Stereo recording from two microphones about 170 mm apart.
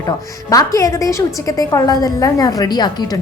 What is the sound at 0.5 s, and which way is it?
A woman's voice, 20° left (ahead or behind).